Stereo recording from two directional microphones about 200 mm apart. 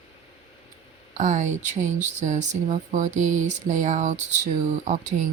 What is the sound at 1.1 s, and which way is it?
Speech, 35° right (ahead or behind).